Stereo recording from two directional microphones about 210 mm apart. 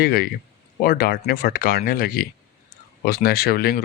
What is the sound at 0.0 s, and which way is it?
Speech, 45° left (ahead or behind).